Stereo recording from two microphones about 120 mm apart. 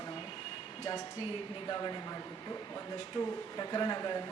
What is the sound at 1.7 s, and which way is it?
A man's voice, 30° left (ahead or behind).